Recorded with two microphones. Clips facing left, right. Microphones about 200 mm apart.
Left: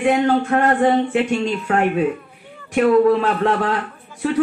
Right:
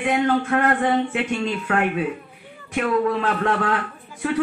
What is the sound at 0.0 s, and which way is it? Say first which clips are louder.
Speech: left 4 dB; 30° left (ahead or behind).